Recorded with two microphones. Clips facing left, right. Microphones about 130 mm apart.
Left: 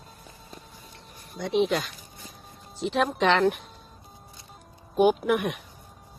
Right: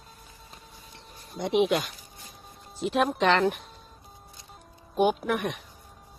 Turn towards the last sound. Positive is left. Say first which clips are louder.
# left 4 dB
turn(degrees=5)  # may be behind; listen again after turning